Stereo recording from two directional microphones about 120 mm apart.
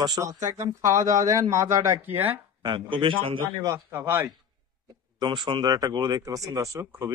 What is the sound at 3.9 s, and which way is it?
Speech, 15° right (ahead or behind).